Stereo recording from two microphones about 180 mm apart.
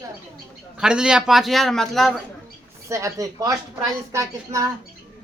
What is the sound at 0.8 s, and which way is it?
A man's voice, 5° right (ahead or behind).